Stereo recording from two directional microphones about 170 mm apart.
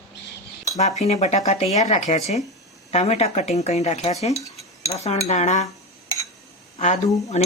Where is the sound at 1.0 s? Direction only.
40° left (ahead or behind).